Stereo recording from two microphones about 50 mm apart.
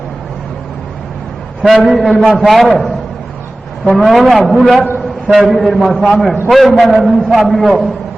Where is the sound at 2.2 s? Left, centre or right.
Centre.